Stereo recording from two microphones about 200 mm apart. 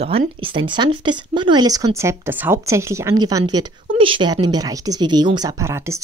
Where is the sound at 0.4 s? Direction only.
25° right (ahead or behind).